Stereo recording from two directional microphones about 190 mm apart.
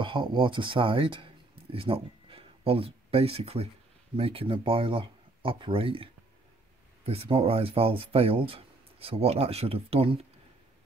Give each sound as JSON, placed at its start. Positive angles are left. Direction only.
{"t": 0.0, "sound": "speech", "side_deg": -25}
{"t": 7.1, "sound": "speech", "side_deg": -30}